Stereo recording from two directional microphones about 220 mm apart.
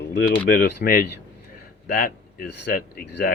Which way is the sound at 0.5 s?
45° left (ahead or behind).